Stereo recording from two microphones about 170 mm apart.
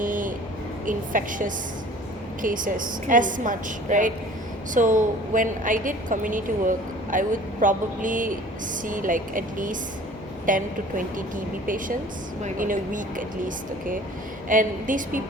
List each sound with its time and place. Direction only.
0.0 s a sound: 50° right (ahead or behind)
0.9 s a woman's voice: 50° right (ahead or behind)
14.5 s a woman's voice: 50° right (ahead or behind)